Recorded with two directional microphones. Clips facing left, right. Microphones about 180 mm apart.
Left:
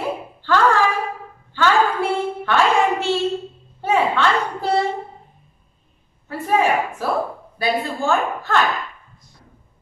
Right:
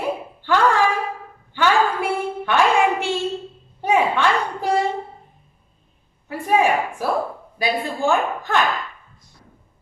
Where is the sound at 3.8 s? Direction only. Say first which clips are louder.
Even; 15° right (ahead or behind).